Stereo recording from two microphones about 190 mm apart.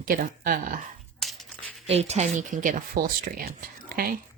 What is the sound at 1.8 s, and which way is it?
Speech, 35° right (ahead or behind).